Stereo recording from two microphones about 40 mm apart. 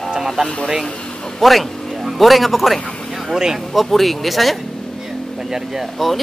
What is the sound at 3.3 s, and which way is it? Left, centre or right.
Speech, centre.